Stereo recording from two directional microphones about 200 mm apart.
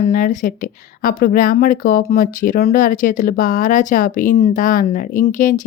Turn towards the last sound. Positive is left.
turn(degrees=40)  # may be behind; listen again after turning